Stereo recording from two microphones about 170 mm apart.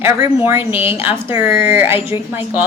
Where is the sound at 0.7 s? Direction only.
35° left (ahead or behind).